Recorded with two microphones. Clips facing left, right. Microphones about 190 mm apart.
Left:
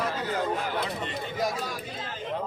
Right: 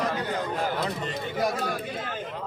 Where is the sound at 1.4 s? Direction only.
60° right (ahead or behind).